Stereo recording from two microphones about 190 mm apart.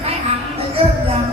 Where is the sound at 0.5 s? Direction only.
30° right (ahead or behind).